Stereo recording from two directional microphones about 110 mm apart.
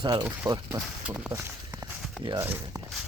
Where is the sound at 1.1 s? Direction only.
10° right (ahead or behind).